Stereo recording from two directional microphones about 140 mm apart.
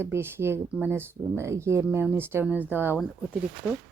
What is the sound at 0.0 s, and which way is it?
Speech, 15° right (ahead or behind).